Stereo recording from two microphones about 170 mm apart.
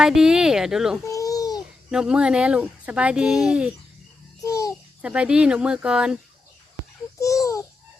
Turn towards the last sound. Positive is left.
turn(degrees=20)  # may be behind; listen again after turning